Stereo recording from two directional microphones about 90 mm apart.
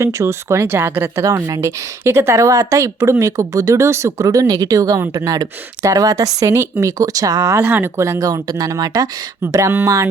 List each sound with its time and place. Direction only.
0.0 s speech: 35° right (ahead or behind)
7.6 s speech: 20° right (ahead or behind)
7.9 s speech: 35° right (ahead or behind)